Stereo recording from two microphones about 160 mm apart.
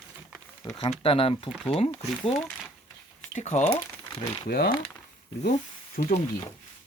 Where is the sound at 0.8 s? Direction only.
35° left (ahead or behind).